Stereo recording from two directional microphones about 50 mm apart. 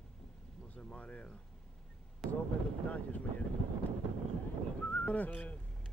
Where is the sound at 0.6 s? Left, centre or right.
Left.